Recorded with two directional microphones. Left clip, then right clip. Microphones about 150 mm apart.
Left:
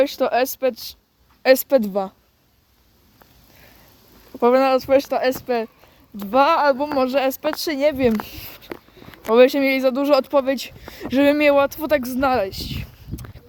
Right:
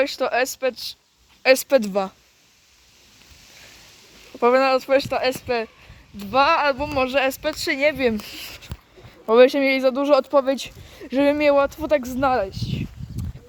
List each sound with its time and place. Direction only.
0.0 s speech: 50° left (ahead or behind)
1.4 s a woman's voice: 35° left (ahead or behind)
1.6 s a woman's voice: 20° left (ahead or behind)
4.4 s speech: 35° left (ahead or behind); by 5.6 s 50° left (ahead or behind)
6.1 s speech: 80° left; by 7.1 s 60° left (ahead or behind)
7.1 s speech: 40° left (ahead or behind)
8.4 s speech: 20° left (ahead or behind)
9.2 s speech: 5° left (ahead or behind)
10.2 s speech: centre (ahead or behind)
10.9 s speech: 20° left (ahead or behind)
12.0 s a woman's voice: 5° left (ahead or behind)
12.3 s speech: 20° left (ahead or behind)